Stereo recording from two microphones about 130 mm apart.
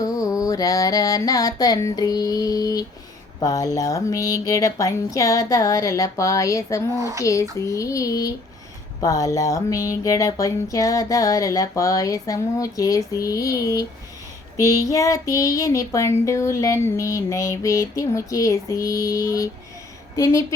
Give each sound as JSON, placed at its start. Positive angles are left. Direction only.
{"t": 0.0, "sound": "music", "side_deg": 25}
{"t": 3.4, "sound": "speech", "side_deg": 25}
{"t": 7.0, "sound": "speech", "side_deg": -25}
{"t": 7.6, "sound": "speech", "side_deg": 25}